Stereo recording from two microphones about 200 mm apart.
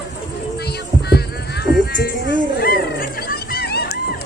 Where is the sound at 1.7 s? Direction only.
50° left (ahead or behind).